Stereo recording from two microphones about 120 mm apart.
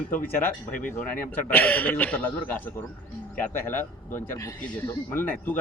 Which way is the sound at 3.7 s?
25° left (ahead or behind).